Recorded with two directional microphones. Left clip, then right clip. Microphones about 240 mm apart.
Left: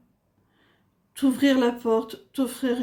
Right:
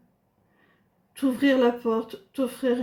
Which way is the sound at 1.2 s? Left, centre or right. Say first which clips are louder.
Even; left.